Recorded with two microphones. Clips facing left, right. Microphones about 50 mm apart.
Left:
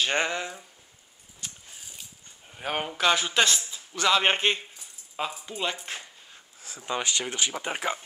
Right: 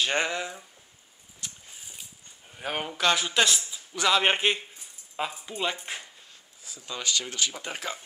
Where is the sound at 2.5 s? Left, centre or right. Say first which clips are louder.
Left 1 dB; centre.